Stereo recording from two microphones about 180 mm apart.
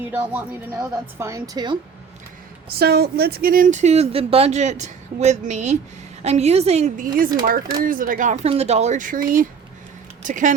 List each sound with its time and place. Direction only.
0.1 s a woman's voice: 10° right (ahead or behind)
2.6 s speech: 60° right (ahead or behind); by 10.5 s 45° right (ahead or behind)